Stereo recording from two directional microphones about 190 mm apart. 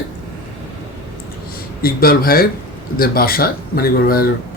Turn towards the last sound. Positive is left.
turn(degrees=50)  # may be behind; listen again after turning